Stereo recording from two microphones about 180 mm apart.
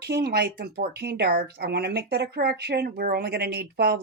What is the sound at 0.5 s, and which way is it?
Speech, 55° right (ahead or behind).